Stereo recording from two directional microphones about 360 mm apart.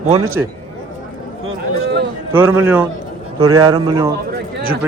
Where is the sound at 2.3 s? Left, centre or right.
Centre.